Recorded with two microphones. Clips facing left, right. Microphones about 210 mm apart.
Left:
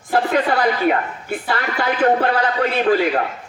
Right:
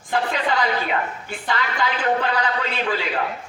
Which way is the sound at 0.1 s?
50° left (ahead or behind).